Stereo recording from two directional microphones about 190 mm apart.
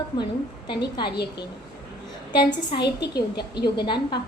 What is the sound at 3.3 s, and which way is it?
Speech, 60° left (ahead or behind).